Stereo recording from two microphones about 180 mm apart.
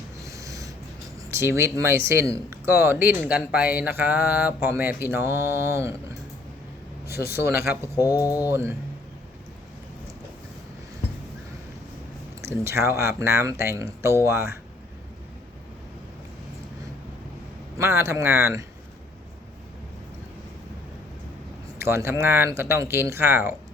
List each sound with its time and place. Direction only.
0.2 s snort: 15° right (ahead or behind)
1.3 s mantra: 15° right (ahead or behind)
7.2 s mantra: 15° right (ahead or behind)
7.9 s speech: 20° left (ahead or behind)
8.4 s mantra: 15° right (ahead or behind)
12.4 s mantra: 15° right (ahead or behind)
17.7 s mantra: 15° right (ahead or behind)
21.8 s mantra: 15° right (ahead or behind)